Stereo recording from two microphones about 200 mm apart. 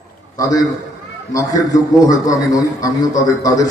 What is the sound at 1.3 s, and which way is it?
A man's voice, 15° left (ahead or behind).